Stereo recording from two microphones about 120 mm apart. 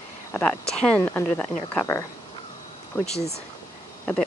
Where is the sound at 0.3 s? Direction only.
15° left (ahead or behind).